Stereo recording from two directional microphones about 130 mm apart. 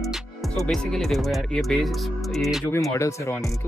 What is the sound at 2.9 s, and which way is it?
Speech, 20° left (ahead or behind).